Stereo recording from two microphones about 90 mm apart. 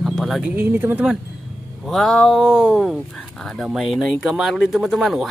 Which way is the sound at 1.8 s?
5° left (ahead or behind).